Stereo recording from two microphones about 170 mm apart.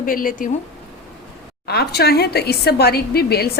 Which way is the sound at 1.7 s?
70° left (ahead or behind).